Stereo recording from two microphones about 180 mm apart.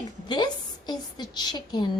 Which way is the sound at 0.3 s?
25° left (ahead or behind).